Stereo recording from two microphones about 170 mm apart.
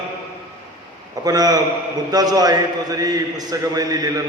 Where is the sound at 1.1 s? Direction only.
20° right (ahead or behind).